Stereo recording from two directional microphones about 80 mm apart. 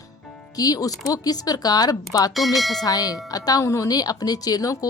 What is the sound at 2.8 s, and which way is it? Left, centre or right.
A woman's voice, left.